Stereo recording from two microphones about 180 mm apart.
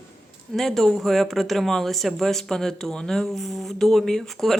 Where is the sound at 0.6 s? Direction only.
Centre (ahead or behind).